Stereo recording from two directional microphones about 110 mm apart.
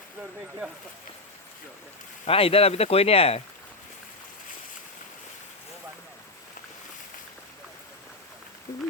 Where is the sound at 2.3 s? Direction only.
60° left (ahead or behind).